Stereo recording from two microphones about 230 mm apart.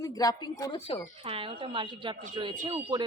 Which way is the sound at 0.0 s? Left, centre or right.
Centre.